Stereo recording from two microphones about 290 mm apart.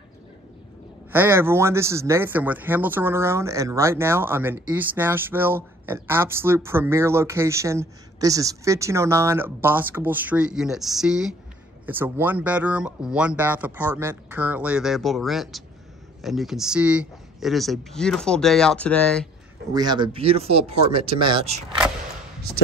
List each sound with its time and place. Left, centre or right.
1.1 s speech: centre
19.7 s speech: centre